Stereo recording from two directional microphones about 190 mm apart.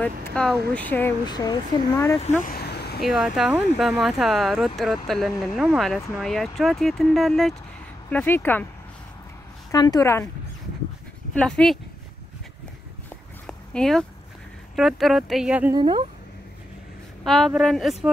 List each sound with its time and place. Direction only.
0.0 s speech: 5° left (ahead or behind)
1.2 s speech: 20° left (ahead or behind)
2.4 s vehicle: 55° left (ahead or behind)
3.0 s speech: centre (ahead or behind)
9.7 s speech: 20° left (ahead or behind)
11.3 s speech: 5° left (ahead or behind)
13.5 s dog: 5° left (ahead or behind)
14.8 s speech: centre (ahead or behind)
15.7 s speech: 25° right (ahead or behind)
17.2 s speech: centre (ahead or behind)